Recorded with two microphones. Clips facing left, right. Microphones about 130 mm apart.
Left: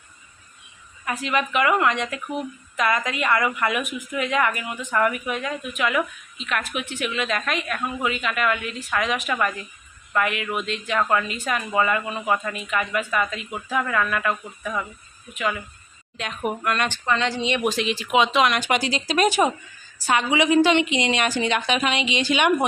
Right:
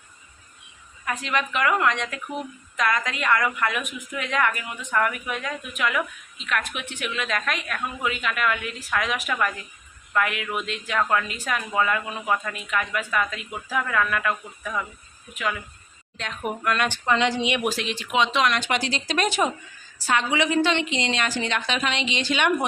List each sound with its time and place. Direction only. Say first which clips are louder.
1.0 s a woman's voice: left 2 dB; 5° left (ahead or behind)
16.9 s a woman's voice: right 1 dB; 15° right (ahead or behind); by 22.5 s 10° left (ahead or behind)